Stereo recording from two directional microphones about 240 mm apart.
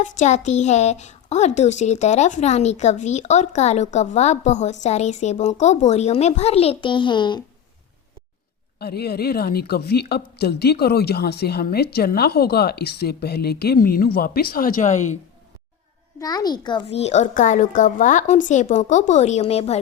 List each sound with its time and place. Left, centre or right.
0.0 s a woman's voice: left
8.8 s a woman's voice: left
16.2 s a woman's voice: centre